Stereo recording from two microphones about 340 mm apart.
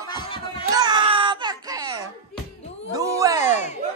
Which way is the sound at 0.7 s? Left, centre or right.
Centre.